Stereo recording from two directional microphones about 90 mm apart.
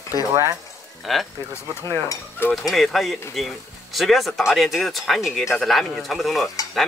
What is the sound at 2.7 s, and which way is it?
Speech, centre (ahead or behind).